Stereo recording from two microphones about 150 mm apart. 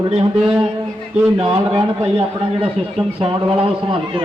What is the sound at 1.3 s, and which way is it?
Speech, 30° right (ahead or behind).